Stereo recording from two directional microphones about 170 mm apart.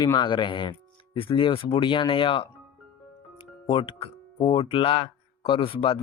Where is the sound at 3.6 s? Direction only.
30° left (ahead or behind).